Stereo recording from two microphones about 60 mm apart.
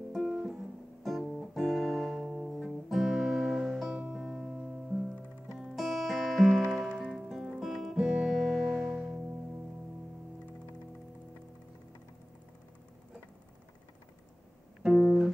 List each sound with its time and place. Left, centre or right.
0.1 s music: centre
3.9 s music: centre
4.2 s music: centre
14.8 s music: centre